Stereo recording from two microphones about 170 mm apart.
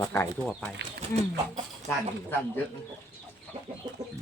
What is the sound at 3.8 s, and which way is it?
Chicken, 25° right (ahead or behind).